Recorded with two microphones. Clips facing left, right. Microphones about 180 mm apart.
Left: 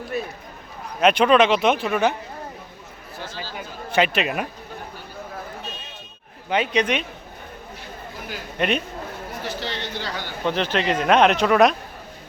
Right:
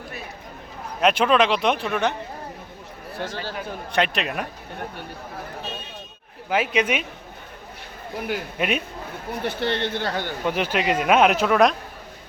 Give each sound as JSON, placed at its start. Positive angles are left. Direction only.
{"t": 1.0, "sound": "speech", "side_deg": 0}
{"t": 3.2, "sound": "speech", "side_deg": -60}
{"t": 3.9, "sound": "speech", "side_deg": 5}
{"t": 6.5, "sound": "speech", "side_deg": -5}
{"t": 8.5, "sound": "speech", "side_deg": -5}
{"t": 9.4, "sound": "speech", "side_deg": -55}
{"t": 10.4, "sound": "speech", "side_deg": -10}